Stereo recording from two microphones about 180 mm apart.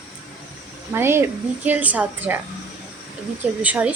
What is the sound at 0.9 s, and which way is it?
Speech, 15° right (ahead or behind).